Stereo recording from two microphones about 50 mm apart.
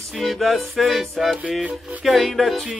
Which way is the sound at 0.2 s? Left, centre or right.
Centre.